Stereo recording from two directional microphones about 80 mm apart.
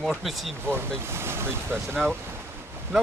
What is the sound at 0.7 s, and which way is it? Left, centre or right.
Speech, right.